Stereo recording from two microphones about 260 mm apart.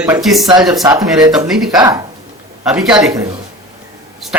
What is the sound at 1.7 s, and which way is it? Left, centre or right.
Speech, centre.